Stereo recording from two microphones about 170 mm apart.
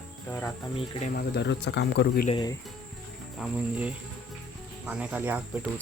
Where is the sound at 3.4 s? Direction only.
5° right (ahead or behind).